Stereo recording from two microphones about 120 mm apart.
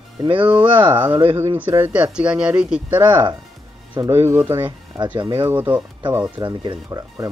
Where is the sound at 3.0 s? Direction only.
35° right (ahead or behind).